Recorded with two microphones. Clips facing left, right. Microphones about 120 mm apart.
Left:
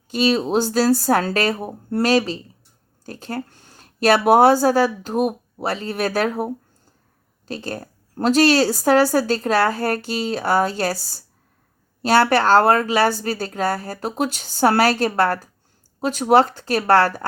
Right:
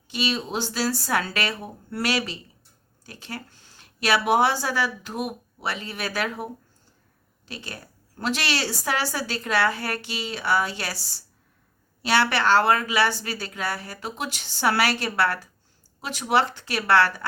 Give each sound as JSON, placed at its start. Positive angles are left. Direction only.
{"t": 0.1, "sound": "a woman's voice", "side_deg": 45}